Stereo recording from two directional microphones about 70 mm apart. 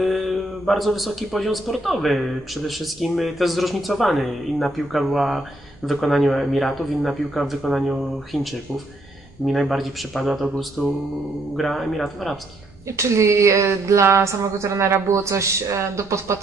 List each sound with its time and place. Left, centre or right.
0.0 s a man's voice: centre
9.5 s a man's voice: centre
12.9 s speech: right